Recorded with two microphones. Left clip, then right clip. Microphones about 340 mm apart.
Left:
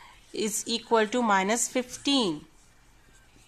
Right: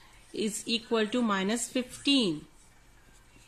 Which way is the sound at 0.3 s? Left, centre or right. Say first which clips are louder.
Left 2 dB; centre.